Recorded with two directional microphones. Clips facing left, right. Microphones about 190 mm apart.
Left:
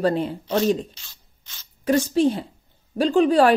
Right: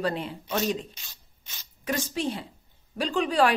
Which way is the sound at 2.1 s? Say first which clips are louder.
Left 10 dB; 40° left (ahead or behind).